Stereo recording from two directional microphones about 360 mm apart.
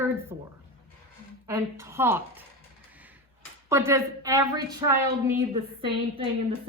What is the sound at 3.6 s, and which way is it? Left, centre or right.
A woman's voice, centre.